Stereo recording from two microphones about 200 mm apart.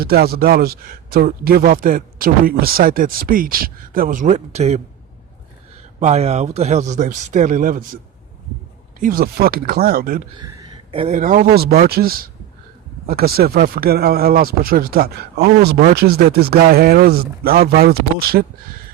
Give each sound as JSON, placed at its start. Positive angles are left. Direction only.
{"t": 0.0, "sound": "speech", "side_deg": -50}
{"t": 6.0, "sound": "speech", "side_deg": -35}
{"t": 9.0, "sound": "speech", "side_deg": -45}
{"t": 10.3, "sound": "a sound", "side_deg": -20}
{"t": 11.0, "sound": "speech", "side_deg": -40}